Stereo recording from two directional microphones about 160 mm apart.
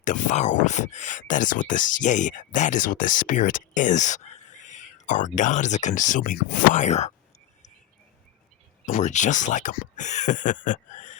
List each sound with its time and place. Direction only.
0.0 s speech: 50° left (ahead or behind)
8.9 s speech: 50° left (ahead or behind)